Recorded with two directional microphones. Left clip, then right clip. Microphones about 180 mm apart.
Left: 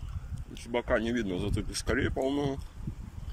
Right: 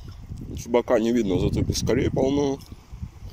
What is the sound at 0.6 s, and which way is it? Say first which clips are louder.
Speech: right 8 dB; 25° right (ahead or behind).